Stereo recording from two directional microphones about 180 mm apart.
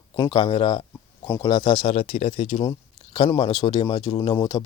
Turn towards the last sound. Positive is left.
turn(degrees=25)  # may be behind; listen again after turning